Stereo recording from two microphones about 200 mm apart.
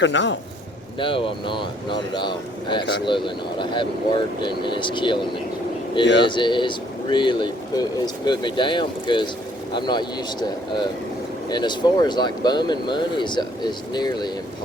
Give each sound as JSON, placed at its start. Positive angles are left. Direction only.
{"t": 0.0, "sound": "speech", "side_deg": 65}
{"t": 0.9, "sound": "speech", "side_deg": 25}
{"t": 6.2, "sound": "speech", "side_deg": 25}